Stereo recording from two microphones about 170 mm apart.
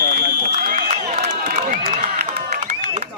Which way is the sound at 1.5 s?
50° right (ahead or behind).